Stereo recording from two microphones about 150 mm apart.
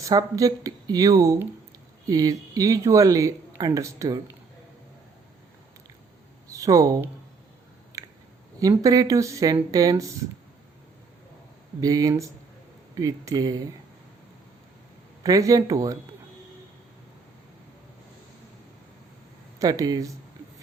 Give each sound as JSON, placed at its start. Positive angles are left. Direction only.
{"t": 0.0, "sound": "speech", "side_deg": -25}
{"t": 6.5, "sound": "speech", "side_deg": -25}
{"t": 7.9, "sound": "a sound", "side_deg": -25}
{"t": 8.5, "sound": "speech", "side_deg": -25}
{"t": 11.8, "sound": "speech", "side_deg": -25}
{"t": 15.2, "sound": "speech", "side_deg": -25}
{"t": 19.5, "sound": "speech", "side_deg": -25}